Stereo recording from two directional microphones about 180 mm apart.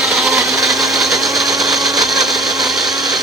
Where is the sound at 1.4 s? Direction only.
Centre (ahead or behind).